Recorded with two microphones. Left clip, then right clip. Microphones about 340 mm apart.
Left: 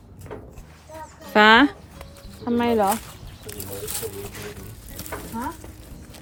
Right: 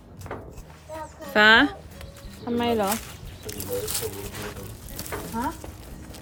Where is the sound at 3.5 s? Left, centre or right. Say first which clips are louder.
Right 4 dB; centre.